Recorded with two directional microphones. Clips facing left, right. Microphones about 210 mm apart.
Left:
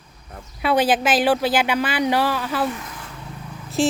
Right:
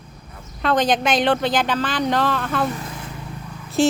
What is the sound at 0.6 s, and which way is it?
Speech, 10° left (ahead or behind).